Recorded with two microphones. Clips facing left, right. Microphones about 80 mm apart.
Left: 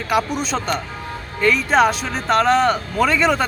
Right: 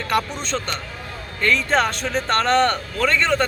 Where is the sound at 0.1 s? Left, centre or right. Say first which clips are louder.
Left 3 dB; centre.